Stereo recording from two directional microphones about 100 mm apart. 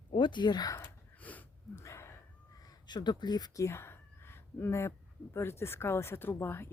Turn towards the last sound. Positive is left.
turn(degrees=25)  # may be behind; listen again after turning